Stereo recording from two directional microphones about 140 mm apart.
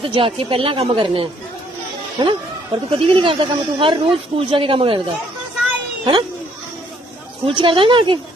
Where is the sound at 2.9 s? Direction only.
40° right (ahead or behind).